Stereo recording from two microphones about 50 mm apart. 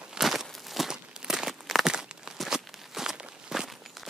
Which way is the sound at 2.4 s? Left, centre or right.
Centre.